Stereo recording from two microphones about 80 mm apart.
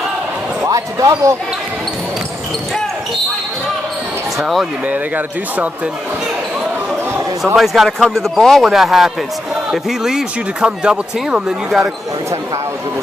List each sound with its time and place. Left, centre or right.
0.7 s speech: right
4.4 s speech: centre
4.8 s speech: centre
7.5 s speech: centre